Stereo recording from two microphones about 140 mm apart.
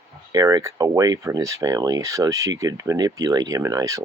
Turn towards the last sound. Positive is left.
turn(degrees=-20)  # may be behind; listen again after turning